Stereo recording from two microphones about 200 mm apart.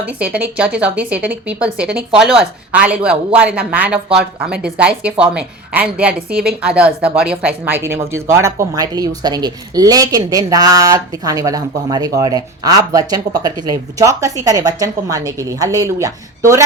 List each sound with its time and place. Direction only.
0.0 s a woman's voice: 5° right (ahead or behind)